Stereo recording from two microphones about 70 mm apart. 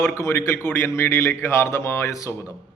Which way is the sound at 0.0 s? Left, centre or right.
Left.